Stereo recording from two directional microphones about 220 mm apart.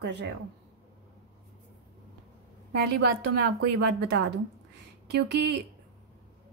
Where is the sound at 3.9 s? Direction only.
50° right (ahead or behind).